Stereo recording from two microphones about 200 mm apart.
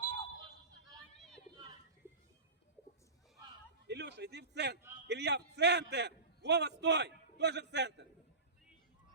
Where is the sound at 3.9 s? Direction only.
60° right (ahead or behind).